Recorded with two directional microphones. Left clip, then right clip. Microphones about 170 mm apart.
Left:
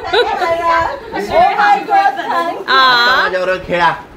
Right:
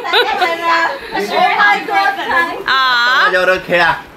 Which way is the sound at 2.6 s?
Centre (ahead or behind).